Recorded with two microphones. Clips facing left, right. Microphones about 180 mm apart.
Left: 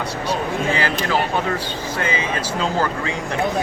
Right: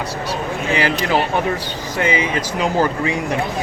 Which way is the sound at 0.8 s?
15° right (ahead or behind).